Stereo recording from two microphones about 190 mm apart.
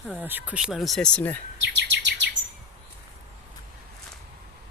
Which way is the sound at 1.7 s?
70° right (ahead or behind).